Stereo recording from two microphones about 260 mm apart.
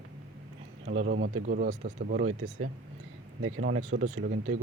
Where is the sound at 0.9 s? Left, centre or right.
Right.